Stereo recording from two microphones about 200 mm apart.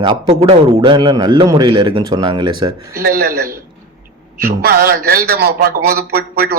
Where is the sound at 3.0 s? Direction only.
50° right (ahead or behind).